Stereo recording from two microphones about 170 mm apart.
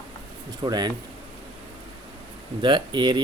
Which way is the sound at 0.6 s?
25° right (ahead or behind).